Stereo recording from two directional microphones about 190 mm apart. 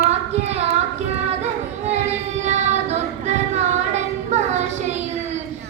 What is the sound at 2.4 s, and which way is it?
Child singing, 35° right (ahead or behind).